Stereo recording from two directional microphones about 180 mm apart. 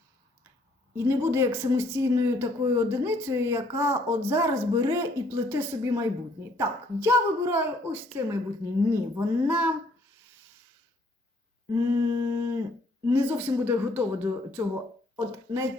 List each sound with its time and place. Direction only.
0.9 s speech: 15° right (ahead or behind)
11.7 s speech: 15° right (ahead or behind)